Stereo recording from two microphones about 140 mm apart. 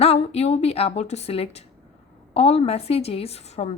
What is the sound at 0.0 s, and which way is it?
A woman's voice, 45° left (ahead or behind).